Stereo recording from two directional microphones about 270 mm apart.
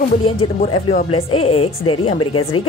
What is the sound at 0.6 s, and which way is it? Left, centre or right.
Speech, left.